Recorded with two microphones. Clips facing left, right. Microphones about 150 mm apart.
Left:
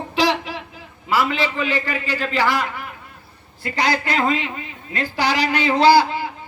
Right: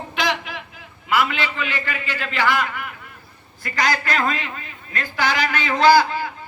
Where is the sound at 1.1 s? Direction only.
35° left (ahead or behind).